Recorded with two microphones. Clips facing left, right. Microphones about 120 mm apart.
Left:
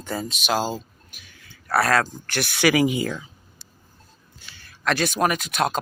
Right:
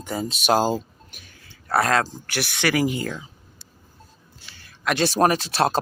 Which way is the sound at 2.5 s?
5° left (ahead or behind).